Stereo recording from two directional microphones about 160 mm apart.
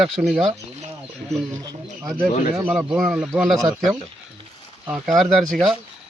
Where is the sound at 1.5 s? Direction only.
20° right (ahead or behind).